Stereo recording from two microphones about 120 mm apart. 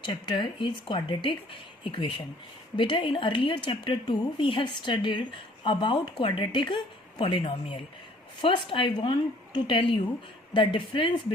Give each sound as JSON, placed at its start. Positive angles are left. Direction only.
{"t": 0.0, "sound": "speech", "side_deg": 40}